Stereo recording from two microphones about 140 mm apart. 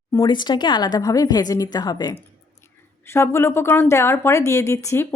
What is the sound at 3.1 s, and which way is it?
Speech, 20° left (ahead or behind).